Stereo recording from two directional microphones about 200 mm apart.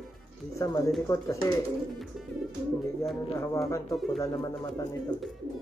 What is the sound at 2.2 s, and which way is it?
Music, centre (ahead or behind).